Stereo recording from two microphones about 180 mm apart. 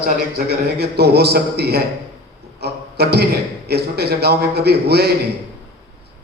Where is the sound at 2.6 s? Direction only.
65° right (ahead or behind).